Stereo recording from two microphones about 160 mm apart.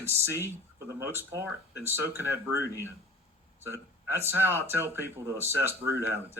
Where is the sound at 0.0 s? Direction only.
15° right (ahead or behind).